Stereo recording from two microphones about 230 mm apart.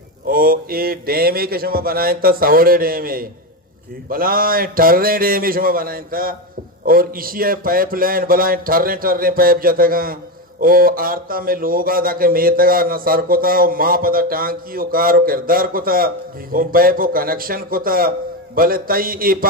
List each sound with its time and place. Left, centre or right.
0.3 s speech: right